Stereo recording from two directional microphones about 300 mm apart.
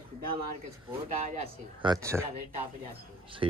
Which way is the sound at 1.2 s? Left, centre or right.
Right.